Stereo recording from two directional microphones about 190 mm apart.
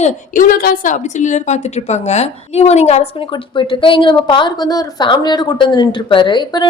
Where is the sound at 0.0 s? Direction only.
45° left (ahead or behind).